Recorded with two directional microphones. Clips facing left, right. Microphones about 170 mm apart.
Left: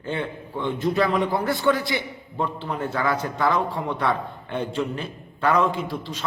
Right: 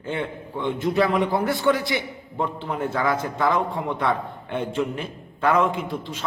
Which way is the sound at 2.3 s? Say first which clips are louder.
Right 1 dB; 15° right (ahead or behind).